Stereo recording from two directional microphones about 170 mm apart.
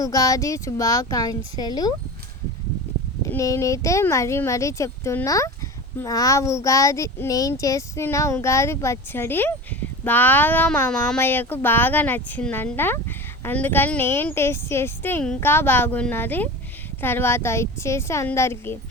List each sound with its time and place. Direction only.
0.0 s speech: 20° left (ahead or behind)
3.2 s speech: 15° left (ahead or behind)